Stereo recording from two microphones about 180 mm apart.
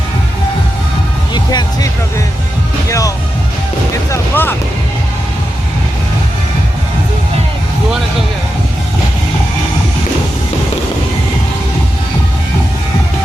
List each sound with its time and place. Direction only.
1.3 s music: 20° left (ahead or behind)
4.1 s speech: 10° left (ahead or behind)